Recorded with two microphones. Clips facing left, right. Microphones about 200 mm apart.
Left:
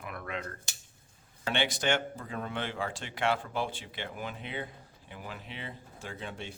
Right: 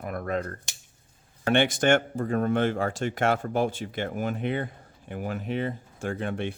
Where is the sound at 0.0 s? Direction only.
45° right (ahead or behind).